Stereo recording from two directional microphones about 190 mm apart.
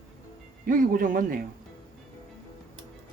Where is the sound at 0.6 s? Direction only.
45° right (ahead or behind).